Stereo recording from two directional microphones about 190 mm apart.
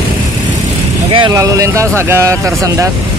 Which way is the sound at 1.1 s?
20° right (ahead or behind).